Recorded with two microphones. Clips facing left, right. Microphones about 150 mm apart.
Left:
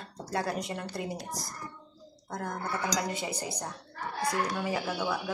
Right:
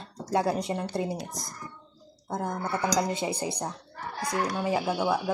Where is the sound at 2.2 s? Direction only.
25° right (ahead or behind).